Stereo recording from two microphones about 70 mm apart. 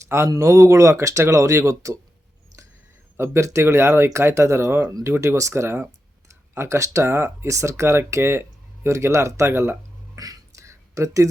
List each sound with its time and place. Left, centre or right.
0.3 s speech: right
3.2 s speech: right
10.2 s a sound: right